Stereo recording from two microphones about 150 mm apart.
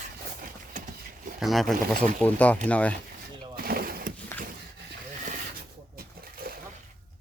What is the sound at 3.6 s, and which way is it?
Vehicle, 85° right.